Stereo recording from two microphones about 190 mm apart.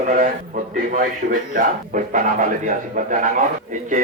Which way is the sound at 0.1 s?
45° right (ahead or behind).